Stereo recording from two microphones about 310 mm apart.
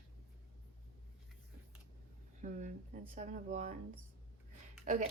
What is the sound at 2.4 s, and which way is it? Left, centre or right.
A woman's voice, right.